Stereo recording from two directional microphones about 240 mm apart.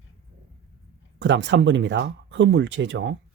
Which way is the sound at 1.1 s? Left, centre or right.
Right.